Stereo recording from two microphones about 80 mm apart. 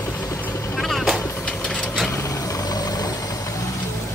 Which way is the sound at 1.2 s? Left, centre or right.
Left.